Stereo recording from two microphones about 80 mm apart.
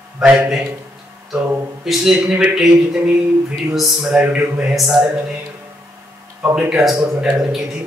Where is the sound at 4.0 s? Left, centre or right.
Centre.